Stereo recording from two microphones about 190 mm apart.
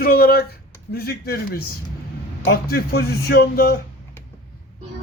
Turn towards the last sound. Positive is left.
turn(degrees=55)  # may be behind; listen again after turning